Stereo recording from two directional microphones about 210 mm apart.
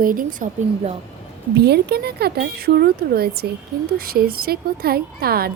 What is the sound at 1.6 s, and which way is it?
A woman's voice, 50° right (ahead or behind).